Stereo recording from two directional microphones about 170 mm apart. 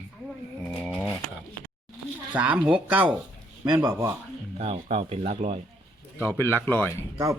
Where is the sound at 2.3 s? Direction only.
10° right (ahead or behind).